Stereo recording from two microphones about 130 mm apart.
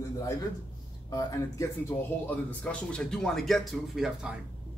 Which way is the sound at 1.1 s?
25° left (ahead or behind).